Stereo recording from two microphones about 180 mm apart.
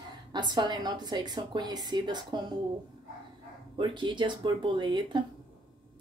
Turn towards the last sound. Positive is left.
turn(degrees=-25)  # may be behind; listen again after turning